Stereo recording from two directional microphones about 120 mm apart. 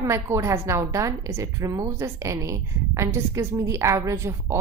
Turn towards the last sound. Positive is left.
turn(degrees=-25)  # may be behind; listen again after turning